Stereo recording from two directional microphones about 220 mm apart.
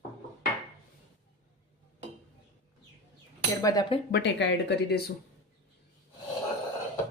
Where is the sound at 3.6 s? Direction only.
15° left (ahead or behind).